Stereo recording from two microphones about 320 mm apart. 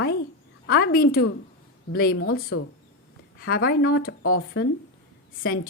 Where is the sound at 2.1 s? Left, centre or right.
Left.